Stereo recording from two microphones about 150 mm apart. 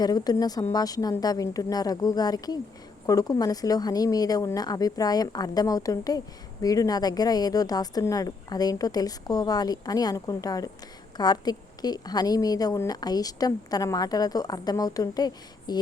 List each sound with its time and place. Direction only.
0.0 s speech: 25° left (ahead or behind)